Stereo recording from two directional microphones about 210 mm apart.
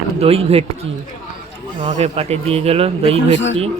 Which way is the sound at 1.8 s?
30° right (ahead or behind).